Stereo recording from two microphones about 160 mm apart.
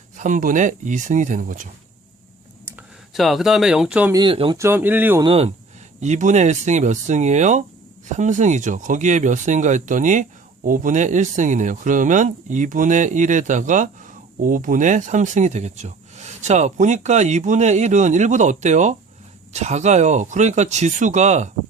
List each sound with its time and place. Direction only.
0.2 s speech: 55° right (ahead or behind)
3.2 s speech: centre (ahead or behind)
4.1 s speech: 30° right (ahead or behind)
4.5 s speech: 15° right (ahead or behind)
5.2 s speech: 35° right (ahead or behind)
6.0 s speech: 50° right (ahead or behind)